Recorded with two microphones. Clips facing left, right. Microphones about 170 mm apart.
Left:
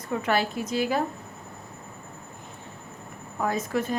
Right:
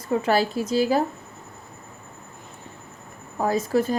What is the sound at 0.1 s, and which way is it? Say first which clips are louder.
Speech: right 4 dB; 35° right (ahead or behind).